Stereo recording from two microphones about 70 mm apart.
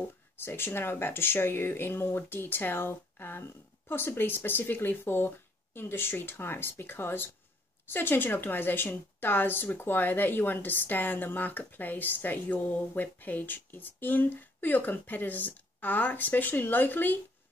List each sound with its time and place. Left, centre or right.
0.5 s a woman's voice: left